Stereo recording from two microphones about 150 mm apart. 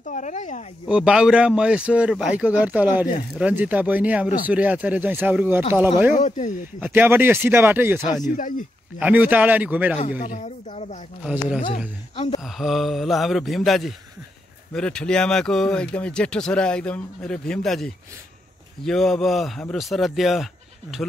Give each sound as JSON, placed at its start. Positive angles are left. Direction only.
{"t": 0.0, "sound": "speech", "side_deg": 55}
{"t": 0.8, "sound": "speech", "side_deg": -5}
{"t": 6.1, "sound": "speech", "side_deg": 55}
{"t": 6.8, "sound": "speech", "side_deg": -15}
{"t": 8.3, "sound": "speech", "side_deg": 60}
{"t": 9.0, "sound": "speech", "side_deg": -10}
{"t": 10.0, "sound": "speech", "side_deg": 65}
{"t": 11.2, "sound": "speech", "side_deg": -5}